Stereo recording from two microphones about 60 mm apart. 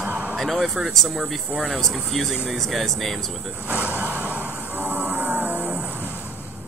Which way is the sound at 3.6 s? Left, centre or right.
Right.